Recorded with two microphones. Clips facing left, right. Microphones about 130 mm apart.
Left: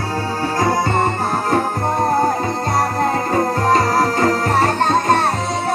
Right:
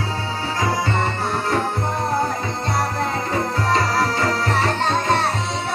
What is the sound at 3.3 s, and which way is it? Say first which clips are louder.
Music: left 4 dB; 45° left (ahead or behind).